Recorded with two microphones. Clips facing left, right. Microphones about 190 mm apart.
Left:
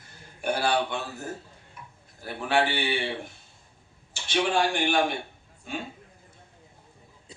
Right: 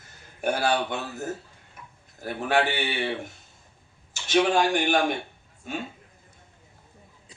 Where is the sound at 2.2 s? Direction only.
45° right (ahead or behind).